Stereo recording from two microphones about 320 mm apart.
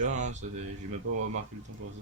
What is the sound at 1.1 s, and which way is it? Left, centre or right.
Speech, right.